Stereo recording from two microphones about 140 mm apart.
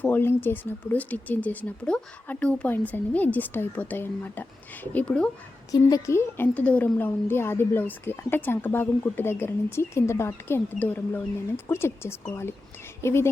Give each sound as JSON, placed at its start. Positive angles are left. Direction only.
{"t": 0.0, "sound": "a woman's voice", "side_deg": 15}
{"t": 5.7, "sound": "a woman's voice", "side_deg": 25}